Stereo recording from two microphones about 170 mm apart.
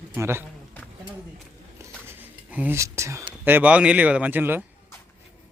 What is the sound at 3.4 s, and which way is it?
A man's voice, 10° right (ahead or behind).